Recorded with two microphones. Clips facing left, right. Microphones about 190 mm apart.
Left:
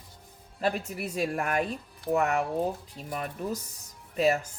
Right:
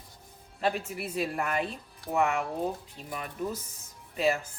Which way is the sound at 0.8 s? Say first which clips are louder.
Left 2 dB; 45° left (ahead or behind).